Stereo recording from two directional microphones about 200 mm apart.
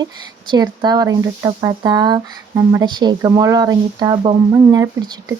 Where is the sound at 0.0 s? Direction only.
20° right (ahead or behind).